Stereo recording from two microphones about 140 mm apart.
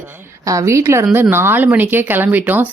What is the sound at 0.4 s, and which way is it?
Speech, 20° right (ahead or behind).